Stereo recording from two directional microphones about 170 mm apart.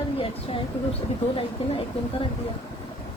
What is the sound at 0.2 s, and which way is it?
Speech, 35° left (ahead or behind).